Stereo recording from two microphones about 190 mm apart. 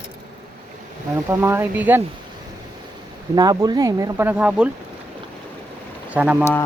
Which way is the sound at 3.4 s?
20° right (ahead or behind).